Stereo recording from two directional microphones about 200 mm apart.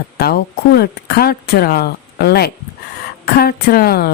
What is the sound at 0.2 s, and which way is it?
Speech, 50° left (ahead or behind).